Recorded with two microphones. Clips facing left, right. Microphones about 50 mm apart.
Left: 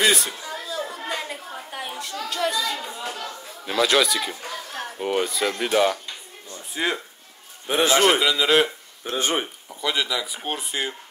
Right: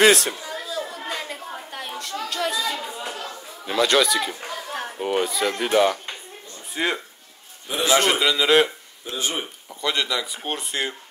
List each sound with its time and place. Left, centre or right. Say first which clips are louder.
0.0 s speech: right 5 dB; right
0.5 s chatter: even; centre
1.1 s a sound: even; centre
2.2 s speech: left 1 dB; centre
2.6 s chatter: right 1 dB; centre
3.6 s speech: right 1 dB; centre
6.7 s speech: right 1 dB; centre
7.6 s a man's voice: left 4 dB; left
8.0 s speech: left 1 dB; centre
9.1 s speech: left 3 dB; left
9.8 s speech: right 1 dB; centre